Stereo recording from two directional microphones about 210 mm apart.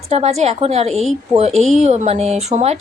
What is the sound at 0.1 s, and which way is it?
A woman's voice, 30° right (ahead or behind).